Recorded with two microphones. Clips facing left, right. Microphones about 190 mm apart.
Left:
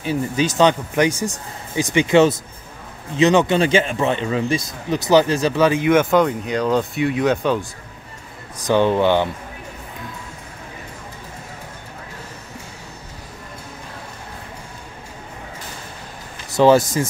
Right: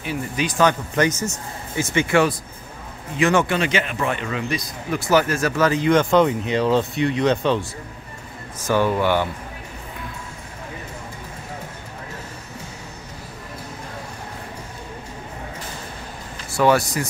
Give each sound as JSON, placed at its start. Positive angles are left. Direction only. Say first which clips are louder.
{"t": 0.0, "sound": "speech", "louder": "left 5 dB", "side_deg": 30}
{"t": 8.6, "sound": "speech", "louder": "left 3 dB", "side_deg": 25}
{"t": 16.5, "sound": "speech", "louder": "left 4 dB", "side_deg": 25}